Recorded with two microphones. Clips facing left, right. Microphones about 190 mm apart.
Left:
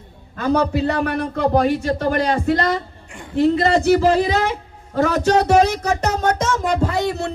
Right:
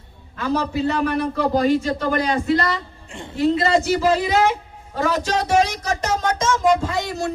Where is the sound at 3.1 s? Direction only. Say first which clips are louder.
Right 2 dB; 25° right (ahead or behind).